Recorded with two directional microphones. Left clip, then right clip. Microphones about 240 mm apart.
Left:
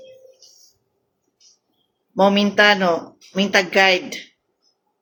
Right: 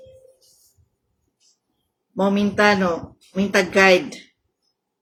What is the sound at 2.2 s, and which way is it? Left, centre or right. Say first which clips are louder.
A man's voice: left 3 dB; centre.